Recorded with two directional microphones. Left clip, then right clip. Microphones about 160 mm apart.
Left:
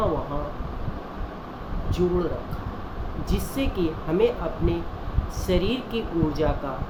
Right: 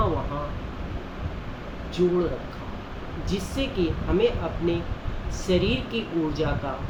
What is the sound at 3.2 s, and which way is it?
A woman's voice, 25° left (ahead or behind).